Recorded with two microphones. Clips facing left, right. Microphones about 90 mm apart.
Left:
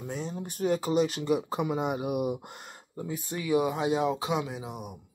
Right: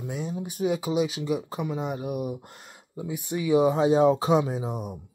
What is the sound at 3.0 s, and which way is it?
Speech, 15° right (ahead or behind).